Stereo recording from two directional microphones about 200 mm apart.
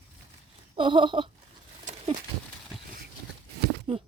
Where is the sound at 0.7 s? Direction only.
25° right (ahead or behind).